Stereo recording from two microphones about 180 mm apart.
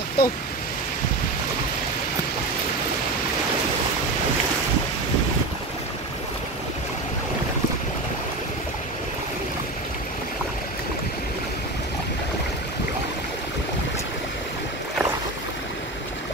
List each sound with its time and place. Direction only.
0.2 s speech: 60° left (ahead or behind)